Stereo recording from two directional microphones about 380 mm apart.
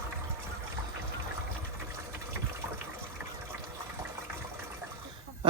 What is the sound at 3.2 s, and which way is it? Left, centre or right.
Water, centre.